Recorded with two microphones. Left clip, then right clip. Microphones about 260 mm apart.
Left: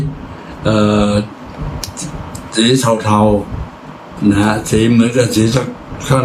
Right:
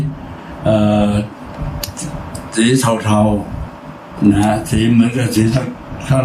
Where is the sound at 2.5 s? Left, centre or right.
Centre.